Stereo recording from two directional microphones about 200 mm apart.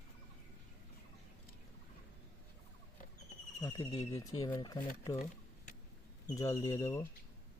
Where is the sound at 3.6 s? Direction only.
15° left (ahead or behind).